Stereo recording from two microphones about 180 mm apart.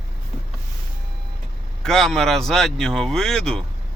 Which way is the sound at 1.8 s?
Centre (ahead or behind).